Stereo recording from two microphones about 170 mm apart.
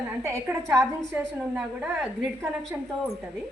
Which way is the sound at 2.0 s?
Centre (ahead or behind).